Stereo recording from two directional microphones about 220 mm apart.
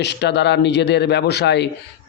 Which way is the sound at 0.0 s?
50° left (ahead or behind).